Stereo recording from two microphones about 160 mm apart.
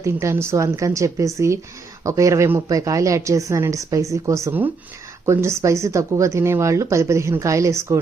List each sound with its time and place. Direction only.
0.0 s a woman's voice: 15° right (ahead or behind)